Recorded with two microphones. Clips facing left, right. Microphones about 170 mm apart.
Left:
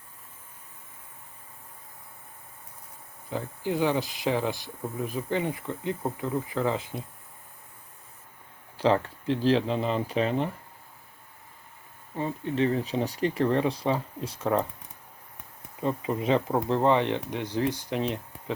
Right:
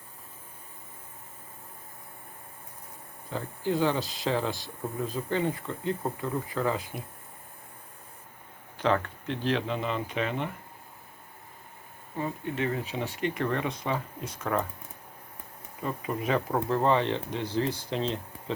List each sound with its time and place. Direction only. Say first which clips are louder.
3.2 s speech: even; 15° left (ahead or behind)
8.8 s speech: left 3 dB; 30° left (ahead or behind)
12.1 s speech: left 3 dB; 30° left (ahead or behind)
15.8 s speech: left 4 dB; 25° left (ahead or behind)